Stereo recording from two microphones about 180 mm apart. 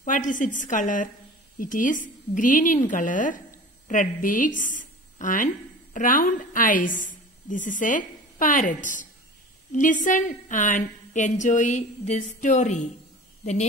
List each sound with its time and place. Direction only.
0.0 s a woman's voice: 45° left (ahead or behind)